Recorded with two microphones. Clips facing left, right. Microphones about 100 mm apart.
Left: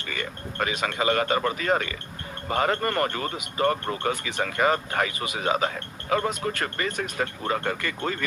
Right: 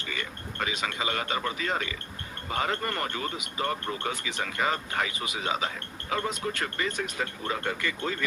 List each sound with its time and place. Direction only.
0.0 s speech: 55° left (ahead or behind)